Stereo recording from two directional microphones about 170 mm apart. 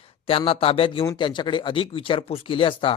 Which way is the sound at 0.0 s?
35° left (ahead or behind).